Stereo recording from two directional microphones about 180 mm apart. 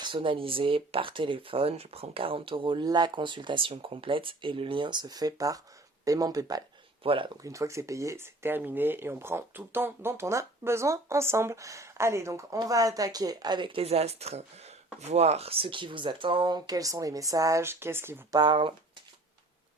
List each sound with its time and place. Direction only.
0.0 s speech: 30° right (ahead or behind)
7.4 s speech: 15° right (ahead or behind)